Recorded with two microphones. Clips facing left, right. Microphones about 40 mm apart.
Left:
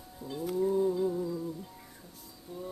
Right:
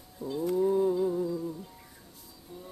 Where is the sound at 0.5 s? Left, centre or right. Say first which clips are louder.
Right 2 dB; centre.